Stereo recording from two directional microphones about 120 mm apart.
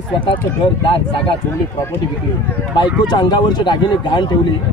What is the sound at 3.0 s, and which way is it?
Speech, 35° left (ahead or behind).